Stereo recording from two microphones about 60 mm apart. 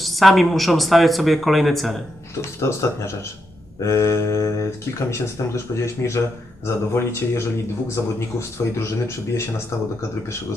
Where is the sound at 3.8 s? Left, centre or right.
Left.